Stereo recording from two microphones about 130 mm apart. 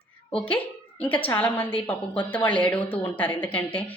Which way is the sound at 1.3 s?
15° left (ahead or behind).